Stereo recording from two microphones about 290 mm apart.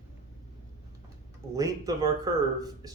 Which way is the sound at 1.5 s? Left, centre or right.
Centre.